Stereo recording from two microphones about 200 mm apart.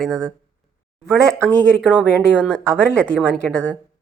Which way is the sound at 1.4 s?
5° left (ahead or behind).